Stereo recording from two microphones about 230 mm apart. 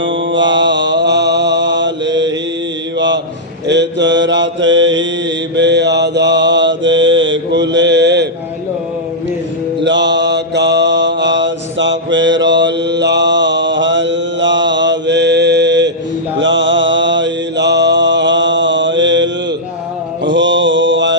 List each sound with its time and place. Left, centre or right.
0.0 s mantra: right
3.7 s mantra: right
9.8 s mantra: right